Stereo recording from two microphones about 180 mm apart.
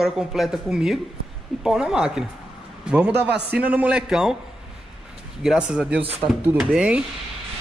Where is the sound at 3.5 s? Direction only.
10° right (ahead or behind).